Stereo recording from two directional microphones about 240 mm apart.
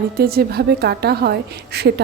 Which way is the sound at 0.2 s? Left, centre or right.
Right.